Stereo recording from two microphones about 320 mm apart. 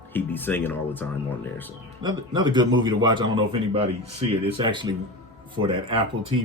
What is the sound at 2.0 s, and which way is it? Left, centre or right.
Speech, centre.